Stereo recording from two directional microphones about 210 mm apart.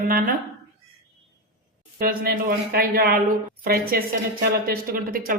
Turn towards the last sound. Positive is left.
turn(degrees=-45)  # may be behind; listen again after turning